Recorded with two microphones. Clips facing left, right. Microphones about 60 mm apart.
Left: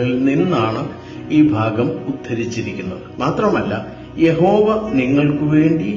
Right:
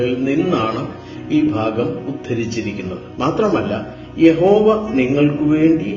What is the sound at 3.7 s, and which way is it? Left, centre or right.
Speech, centre.